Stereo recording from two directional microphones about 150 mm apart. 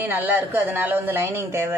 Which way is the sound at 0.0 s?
10° right (ahead or behind).